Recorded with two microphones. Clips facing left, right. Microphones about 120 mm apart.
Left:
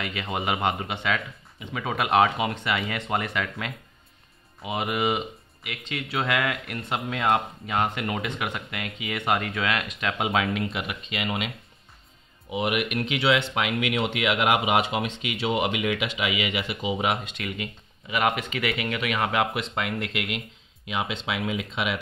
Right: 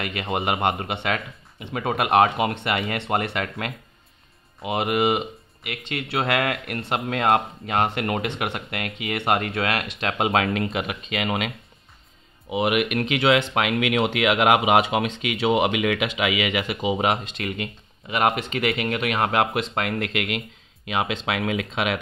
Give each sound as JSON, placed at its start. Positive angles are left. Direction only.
{"t": 0.0, "sound": "speech", "side_deg": -60}
{"t": 10.7, "sound": "speech", "side_deg": -45}
{"t": 12.4, "sound": "speech", "side_deg": -75}
{"t": 13.6, "sound": "speech", "side_deg": -75}
{"t": 16.9, "sound": "speech", "side_deg": -40}
{"t": 19.7, "sound": "speech", "side_deg": -60}